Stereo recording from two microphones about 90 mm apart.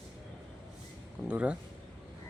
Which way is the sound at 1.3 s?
15° right (ahead or behind).